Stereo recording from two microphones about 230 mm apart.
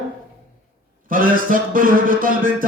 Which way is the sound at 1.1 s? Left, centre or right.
Right.